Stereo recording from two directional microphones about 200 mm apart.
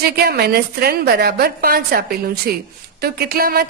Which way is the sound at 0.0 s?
50° right (ahead or behind).